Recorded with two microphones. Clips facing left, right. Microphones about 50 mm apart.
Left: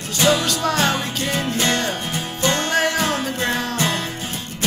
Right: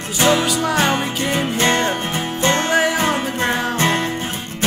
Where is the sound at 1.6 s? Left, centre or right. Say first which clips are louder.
Right 4 dB; right.